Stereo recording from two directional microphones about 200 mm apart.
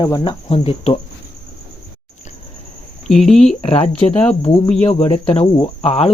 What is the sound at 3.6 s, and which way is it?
Speech, 30° left (ahead or behind).